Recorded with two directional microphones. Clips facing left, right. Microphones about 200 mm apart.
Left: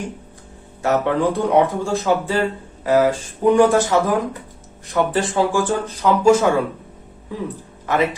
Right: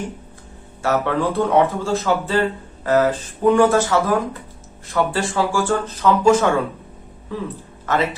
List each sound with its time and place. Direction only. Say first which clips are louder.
0.8 s speech: left 2 dB; 20° left (ahead or behind)